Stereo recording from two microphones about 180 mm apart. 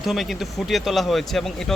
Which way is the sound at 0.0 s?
Centre (ahead or behind).